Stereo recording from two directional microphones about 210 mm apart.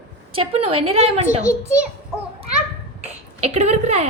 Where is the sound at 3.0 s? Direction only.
30° right (ahead or behind).